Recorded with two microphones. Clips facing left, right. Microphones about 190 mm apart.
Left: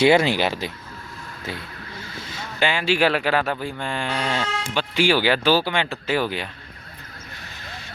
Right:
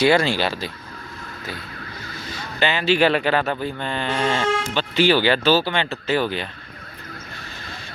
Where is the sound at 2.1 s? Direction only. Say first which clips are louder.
Right 2 dB; 25° left (ahead or behind).